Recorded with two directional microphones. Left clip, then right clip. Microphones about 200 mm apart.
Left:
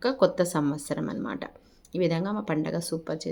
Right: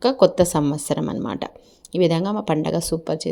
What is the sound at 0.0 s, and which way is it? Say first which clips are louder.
A woman's voice: right 7 dB; 30° right (ahead or behind).